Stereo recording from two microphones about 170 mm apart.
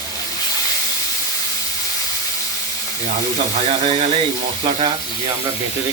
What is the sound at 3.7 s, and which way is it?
Speech, 35° right (ahead or behind).